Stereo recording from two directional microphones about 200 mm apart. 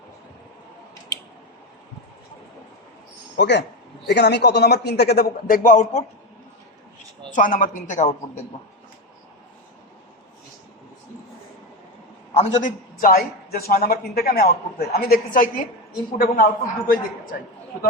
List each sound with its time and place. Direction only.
3.3 s speech: 60° left (ahead or behind); by 6.1 s 35° left (ahead or behind)
7.3 s speech: 40° left (ahead or behind)
12.3 s a man's voice: 35° left (ahead or behind)